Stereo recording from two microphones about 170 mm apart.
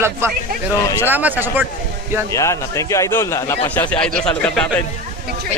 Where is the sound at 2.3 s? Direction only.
20° left (ahead or behind).